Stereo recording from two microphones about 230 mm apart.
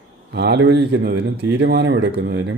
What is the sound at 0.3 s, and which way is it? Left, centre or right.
Speech, right.